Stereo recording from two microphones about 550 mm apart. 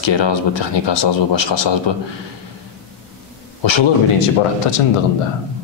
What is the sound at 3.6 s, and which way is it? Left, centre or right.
Speech, left.